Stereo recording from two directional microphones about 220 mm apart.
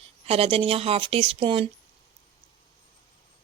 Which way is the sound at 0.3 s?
25° right (ahead or behind).